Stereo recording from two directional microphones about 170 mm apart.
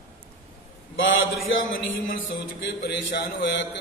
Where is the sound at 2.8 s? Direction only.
85° left.